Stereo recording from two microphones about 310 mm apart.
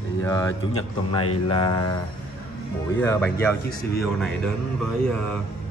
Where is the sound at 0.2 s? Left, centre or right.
Centre.